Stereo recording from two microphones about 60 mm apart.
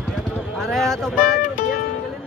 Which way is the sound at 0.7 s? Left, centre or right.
Centre.